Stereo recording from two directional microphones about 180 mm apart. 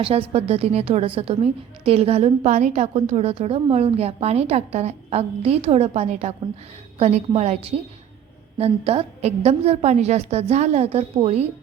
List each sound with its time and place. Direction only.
0.0 s a woman's voice: 35° right (ahead or behind)